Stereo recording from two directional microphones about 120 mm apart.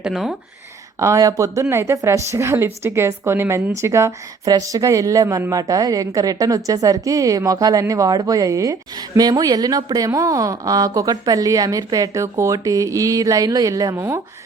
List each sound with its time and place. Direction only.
0.0 s speech: 5° right (ahead or behind)
0.9 s a woman's voice: 25° right (ahead or behind)